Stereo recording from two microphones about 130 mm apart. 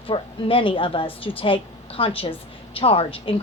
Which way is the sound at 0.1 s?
45° left (ahead or behind).